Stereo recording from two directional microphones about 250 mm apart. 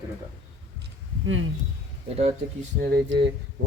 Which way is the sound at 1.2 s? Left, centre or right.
Right.